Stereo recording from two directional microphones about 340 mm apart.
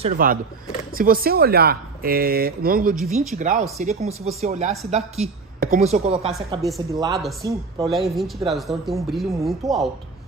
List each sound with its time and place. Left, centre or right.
0.0 s speech: right; by 9.8 s centre